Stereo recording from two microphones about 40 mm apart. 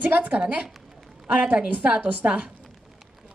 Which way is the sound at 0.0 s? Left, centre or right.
Right.